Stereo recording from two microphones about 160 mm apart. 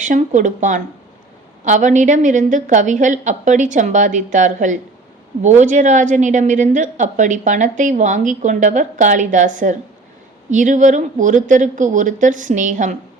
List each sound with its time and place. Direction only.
0.0 s a woman's voice: 50° right (ahead or behind)